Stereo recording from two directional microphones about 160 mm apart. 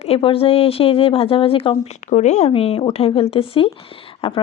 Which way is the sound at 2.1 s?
45° left (ahead or behind).